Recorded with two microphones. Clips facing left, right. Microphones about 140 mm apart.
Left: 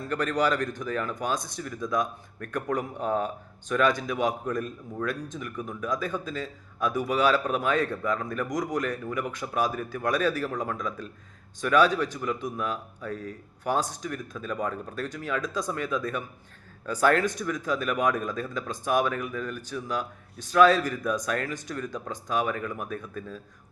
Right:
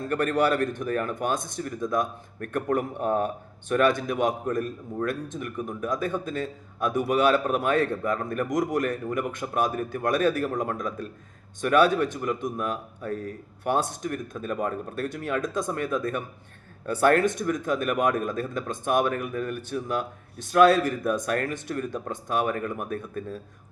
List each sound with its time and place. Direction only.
0.1 s speech: 55° right (ahead or behind)